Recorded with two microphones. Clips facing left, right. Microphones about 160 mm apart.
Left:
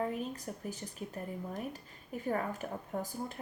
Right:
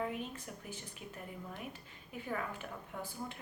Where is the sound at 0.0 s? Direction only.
40° left (ahead or behind).